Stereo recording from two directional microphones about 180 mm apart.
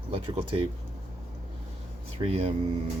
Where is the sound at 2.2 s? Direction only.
35° right (ahead or behind).